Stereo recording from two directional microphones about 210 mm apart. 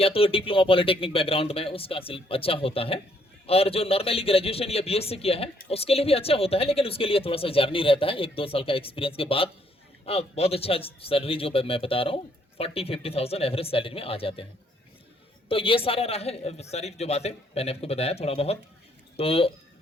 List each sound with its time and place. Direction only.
0.0 s a man's voice: 25° left (ahead or behind)
15.4 s a man's voice: 25° left (ahead or behind)